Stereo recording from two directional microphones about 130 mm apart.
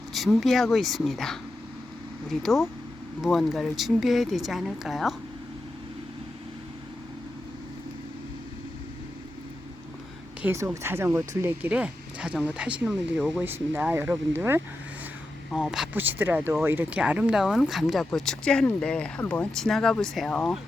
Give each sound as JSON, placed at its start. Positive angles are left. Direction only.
{"t": 0.1, "sound": "speech", "side_deg": 0}
{"t": 2.4, "sound": "speech", "side_deg": 0}
{"t": 10.4, "sound": "speech", "side_deg": -15}
{"t": 15.5, "sound": "speech", "side_deg": -5}
{"t": 15.9, "sound": "speech", "side_deg": -15}